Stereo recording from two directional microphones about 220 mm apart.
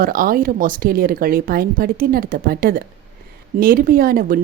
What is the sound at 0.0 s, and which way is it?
A woman's voice, 40° right (ahead or behind).